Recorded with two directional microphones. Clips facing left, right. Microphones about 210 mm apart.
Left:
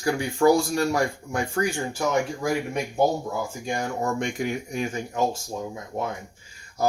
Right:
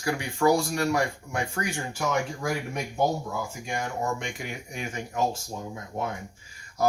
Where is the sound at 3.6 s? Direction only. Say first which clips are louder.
Left 3 dB; 35° left (ahead or behind).